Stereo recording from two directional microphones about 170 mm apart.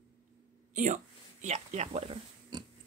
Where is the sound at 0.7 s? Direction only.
45° right (ahead or behind).